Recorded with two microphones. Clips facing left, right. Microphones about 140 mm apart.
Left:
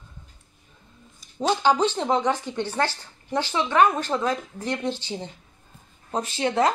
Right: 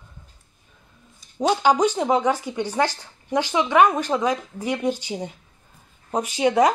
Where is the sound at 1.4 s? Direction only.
10° right (ahead or behind).